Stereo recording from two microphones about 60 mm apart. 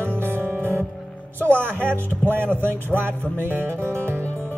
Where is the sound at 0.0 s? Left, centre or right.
Right.